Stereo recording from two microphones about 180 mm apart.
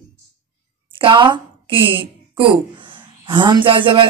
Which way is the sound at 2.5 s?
25° right (ahead or behind).